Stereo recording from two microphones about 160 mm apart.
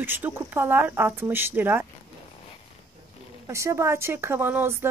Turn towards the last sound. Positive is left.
turn(degrees=-15)  # may be behind; listen again after turning